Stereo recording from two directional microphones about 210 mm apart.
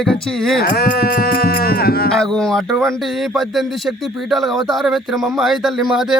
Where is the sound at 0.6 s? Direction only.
45° left (ahead or behind).